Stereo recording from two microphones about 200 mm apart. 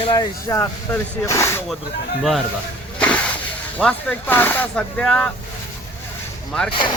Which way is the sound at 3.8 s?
5° left (ahead or behind).